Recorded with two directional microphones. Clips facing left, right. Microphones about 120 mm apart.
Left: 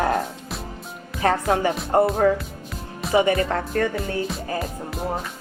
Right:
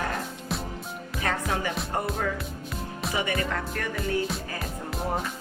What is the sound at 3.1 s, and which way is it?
Music, 35° left (ahead or behind).